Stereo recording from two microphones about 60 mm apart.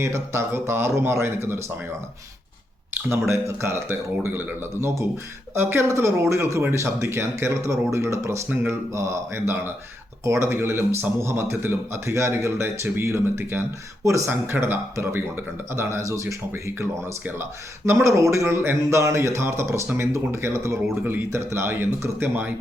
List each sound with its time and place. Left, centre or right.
0.0 s speech: right
3.1 s speech: right
4.3 s speech: right
4.8 s speech: right
9.3 s speech: right
10.2 s speech: right
16.0 s speech: right
16.5 s speech: right
18.8 s speech: right